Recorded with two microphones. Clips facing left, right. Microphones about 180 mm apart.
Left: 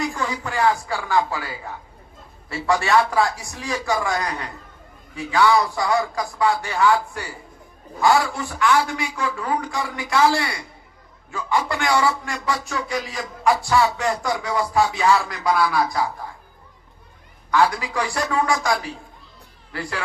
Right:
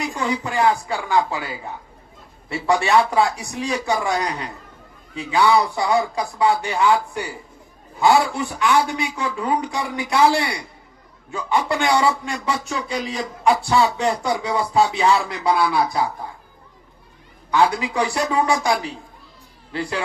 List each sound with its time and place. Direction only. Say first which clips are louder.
0.0 s a man's voice: right 2 dB; 20° right (ahead or behind)
17.5 s a man's voice: right 1 dB; 20° right (ahead or behind)